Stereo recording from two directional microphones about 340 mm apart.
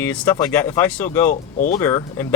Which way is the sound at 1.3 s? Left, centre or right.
Left.